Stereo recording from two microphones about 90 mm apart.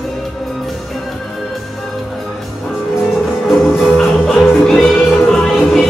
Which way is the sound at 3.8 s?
5° left (ahead or behind).